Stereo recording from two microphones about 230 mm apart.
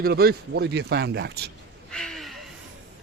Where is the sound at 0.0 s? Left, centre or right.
Right.